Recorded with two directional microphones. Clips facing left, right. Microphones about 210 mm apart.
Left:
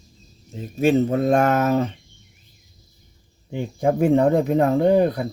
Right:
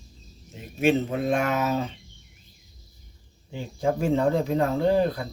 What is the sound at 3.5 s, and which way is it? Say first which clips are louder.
Speech: left 5 dB; 55° left (ahead or behind).